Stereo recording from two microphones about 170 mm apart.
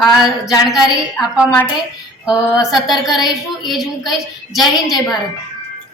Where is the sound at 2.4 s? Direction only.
5° right (ahead or behind).